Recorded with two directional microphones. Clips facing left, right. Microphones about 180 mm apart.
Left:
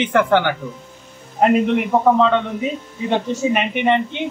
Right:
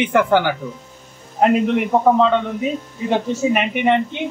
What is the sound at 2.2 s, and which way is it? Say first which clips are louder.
A man's voice: even; 5° right (ahead or behind).